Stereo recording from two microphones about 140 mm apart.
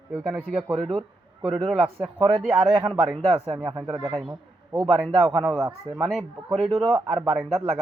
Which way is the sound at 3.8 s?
25° right (ahead or behind).